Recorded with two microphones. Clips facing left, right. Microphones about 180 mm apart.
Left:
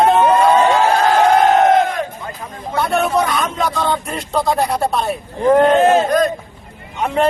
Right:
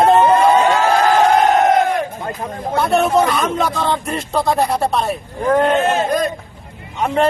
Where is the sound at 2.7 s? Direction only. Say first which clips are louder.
Right 2 dB; centre (ahead or behind).